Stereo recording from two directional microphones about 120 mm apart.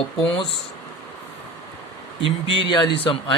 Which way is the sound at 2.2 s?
45° left (ahead or behind).